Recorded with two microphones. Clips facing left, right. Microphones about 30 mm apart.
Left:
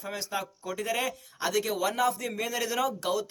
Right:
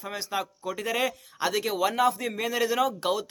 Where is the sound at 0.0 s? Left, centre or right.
Right.